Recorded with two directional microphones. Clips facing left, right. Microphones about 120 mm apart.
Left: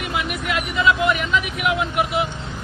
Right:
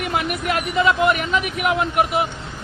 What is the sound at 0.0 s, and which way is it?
Speech, 50° right (ahead or behind).